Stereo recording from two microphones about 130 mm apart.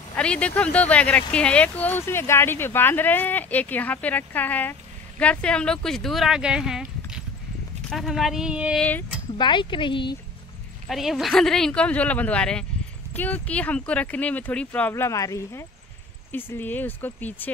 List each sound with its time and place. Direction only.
0.1 s speech: 10° left (ahead or behind); by 8.8 s 5° right (ahead or behind)
9.4 s speech: 40° left (ahead or behind)
10.9 s speech: centre (ahead or behind); by 17.3 s 15° left (ahead or behind)